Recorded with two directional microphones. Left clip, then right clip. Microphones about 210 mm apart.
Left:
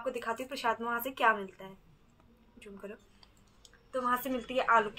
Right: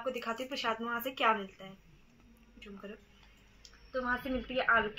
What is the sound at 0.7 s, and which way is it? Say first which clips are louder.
Speech: left 4 dB; 35° left (ahead or behind).